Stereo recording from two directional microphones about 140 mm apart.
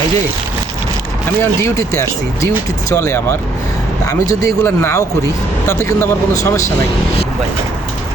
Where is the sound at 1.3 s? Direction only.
20° left (ahead or behind).